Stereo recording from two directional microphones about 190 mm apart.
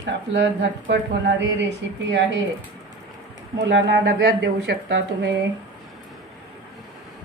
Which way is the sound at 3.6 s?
85° right.